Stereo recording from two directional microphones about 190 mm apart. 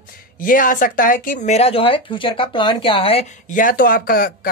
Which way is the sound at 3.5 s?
45° left (ahead or behind).